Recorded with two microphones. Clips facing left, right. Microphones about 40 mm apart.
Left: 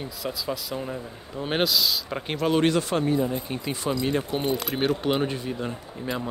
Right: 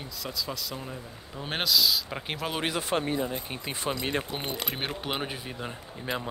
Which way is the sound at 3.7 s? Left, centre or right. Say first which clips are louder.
Left 4 dB; right.